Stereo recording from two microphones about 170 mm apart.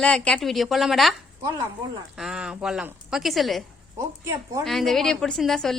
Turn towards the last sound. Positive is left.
turn(degrees=0)  # may be behind; listen again after turning